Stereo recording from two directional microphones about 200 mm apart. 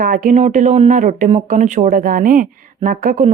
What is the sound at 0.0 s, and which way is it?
Speech, 45° right (ahead or behind).